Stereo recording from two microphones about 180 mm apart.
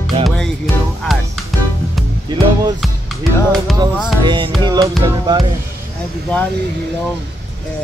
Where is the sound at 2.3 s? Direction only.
25° right (ahead or behind).